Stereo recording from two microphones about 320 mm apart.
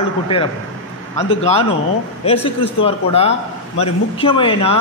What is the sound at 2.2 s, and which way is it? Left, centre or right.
A man's voice, centre.